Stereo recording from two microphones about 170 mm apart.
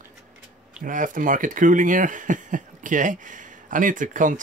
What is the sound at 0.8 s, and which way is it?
Speech, 50° right (ahead or behind).